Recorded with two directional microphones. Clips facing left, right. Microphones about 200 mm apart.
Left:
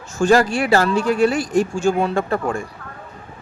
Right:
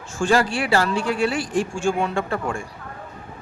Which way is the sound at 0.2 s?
40° left (ahead or behind).